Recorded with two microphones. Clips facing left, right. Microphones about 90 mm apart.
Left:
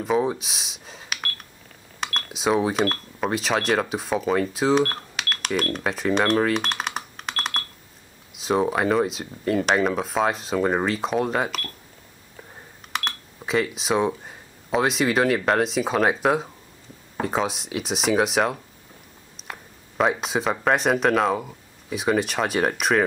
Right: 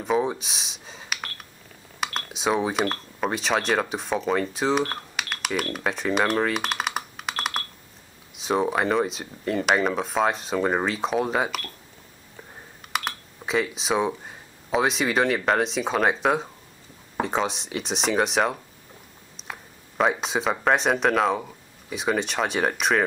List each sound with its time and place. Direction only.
0.0 s speech: centre (ahead or behind)
12.9 s speech: centre (ahead or behind)